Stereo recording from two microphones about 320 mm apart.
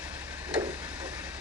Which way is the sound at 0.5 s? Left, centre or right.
Centre.